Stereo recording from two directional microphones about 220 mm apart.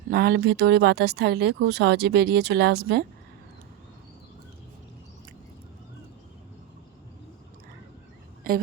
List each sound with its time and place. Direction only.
0.1 s speech: 45° right (ahead or behind)